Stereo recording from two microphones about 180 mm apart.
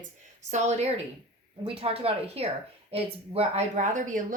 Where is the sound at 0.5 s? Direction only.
40° right (ahead or behind).